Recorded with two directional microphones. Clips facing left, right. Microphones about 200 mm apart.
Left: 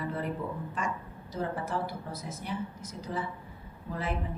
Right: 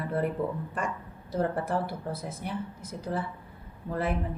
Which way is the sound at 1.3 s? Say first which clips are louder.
Right 5 dB; 55° right (ahead or behind).